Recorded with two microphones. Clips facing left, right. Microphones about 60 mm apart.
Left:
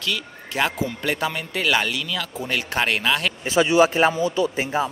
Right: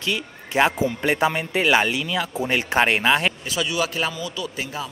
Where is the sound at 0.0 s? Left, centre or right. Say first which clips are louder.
Right 1 dB; right.